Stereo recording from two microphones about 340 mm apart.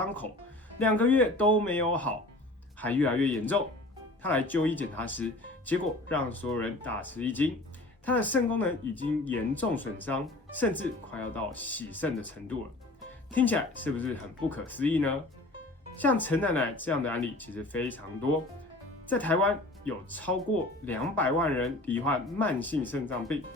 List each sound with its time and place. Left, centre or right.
0.0 s speech: centre
19.0 s speech: centre